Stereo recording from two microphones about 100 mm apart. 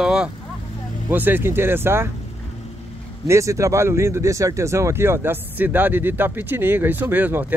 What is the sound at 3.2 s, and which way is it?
Speech, 30° right (ahead or behind).